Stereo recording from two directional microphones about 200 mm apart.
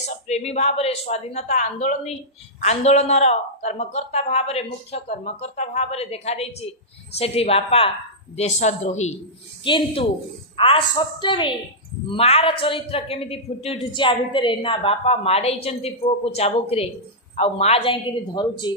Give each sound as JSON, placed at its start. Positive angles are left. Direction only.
{"t": 0.0, "sound": "a woman's voice", "side_deg": 35}